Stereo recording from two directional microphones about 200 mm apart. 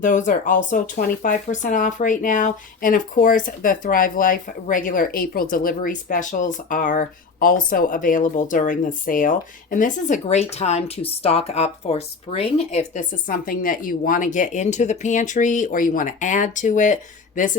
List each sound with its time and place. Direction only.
0.0 s speech: 40° left (ahead or behind)